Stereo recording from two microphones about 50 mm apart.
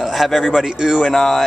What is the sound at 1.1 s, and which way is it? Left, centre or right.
Speech, centre.